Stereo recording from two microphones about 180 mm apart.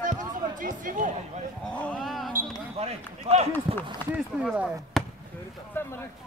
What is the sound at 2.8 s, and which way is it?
Speech, 35° right (ahead or behind).